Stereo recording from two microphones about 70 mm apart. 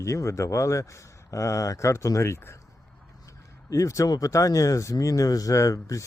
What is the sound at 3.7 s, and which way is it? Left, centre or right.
Speech, left.